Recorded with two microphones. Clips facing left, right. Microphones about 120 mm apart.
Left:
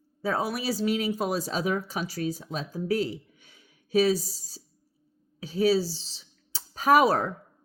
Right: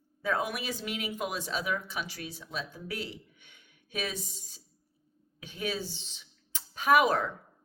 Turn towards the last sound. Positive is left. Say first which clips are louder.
# left 4 dB
turn(degrees=40)  # may be behind; listen again after turning